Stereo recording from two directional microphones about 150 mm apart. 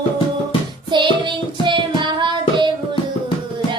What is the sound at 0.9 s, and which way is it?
Child singing, 30° right (ahead or behind).